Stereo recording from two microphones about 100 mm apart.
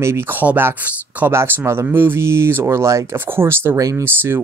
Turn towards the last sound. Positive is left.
turn(degrees=-25)  # may be behind; listen again after turning